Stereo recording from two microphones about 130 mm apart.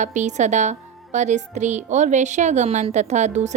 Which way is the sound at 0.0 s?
70° right (ahead or behind).